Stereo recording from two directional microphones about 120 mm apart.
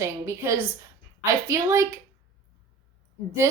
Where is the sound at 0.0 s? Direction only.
25° right (ahead or behind).